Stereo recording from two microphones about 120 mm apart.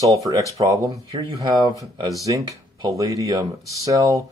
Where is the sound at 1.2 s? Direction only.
40° right (ahead or behind).